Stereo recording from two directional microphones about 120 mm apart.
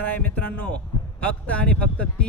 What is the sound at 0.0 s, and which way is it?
Speech, 15° left (ahead or behind).